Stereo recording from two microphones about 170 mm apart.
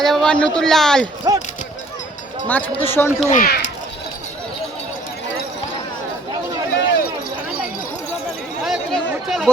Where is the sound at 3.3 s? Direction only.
55° left (ahead or behind).